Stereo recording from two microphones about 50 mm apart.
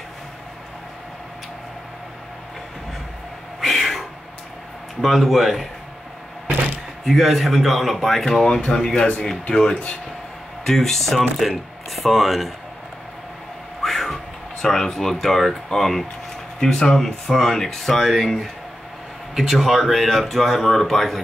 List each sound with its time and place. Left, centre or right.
3.6 s a sound: centre
5.0 s speech: centre
7.1 s speech: centre
10.6 s speech: centre
13.8 s speech: centre
19.3 s speech: centre